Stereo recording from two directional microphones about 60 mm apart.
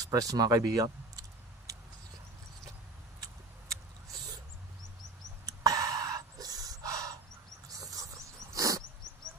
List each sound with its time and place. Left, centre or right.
0.0 s speech: right
5.4 s gasp: right
8.0 s a sound: right